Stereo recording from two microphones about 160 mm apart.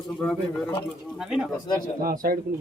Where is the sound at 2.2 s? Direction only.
75° right (ahead or behind).